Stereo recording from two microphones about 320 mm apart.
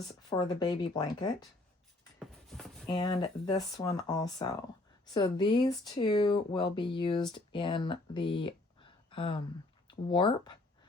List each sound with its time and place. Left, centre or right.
0.3 s speech: centre
2.1 s a sound: centre
2.9 s speech: centre